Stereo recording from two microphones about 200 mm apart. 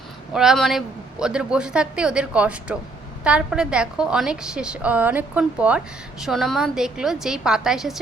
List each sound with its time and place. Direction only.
0.3 s a woman's voice: centre (ahead or behind)